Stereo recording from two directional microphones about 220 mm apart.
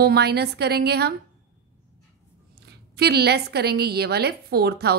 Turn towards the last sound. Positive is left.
turn(degrees=-45)  # may be behind; listen again after turning